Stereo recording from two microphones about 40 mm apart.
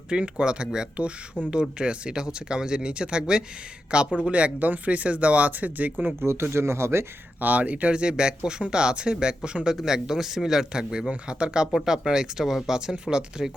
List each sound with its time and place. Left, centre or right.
0.1 s speech: right
1.4 s speech: left
1.8 s speech: right
4.6 s speech: right
6.1 s speech: right
7.3 s speech: right
7.9 s a man's voice: right